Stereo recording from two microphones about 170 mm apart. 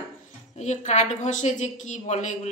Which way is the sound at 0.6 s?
40° left (ahead or behind).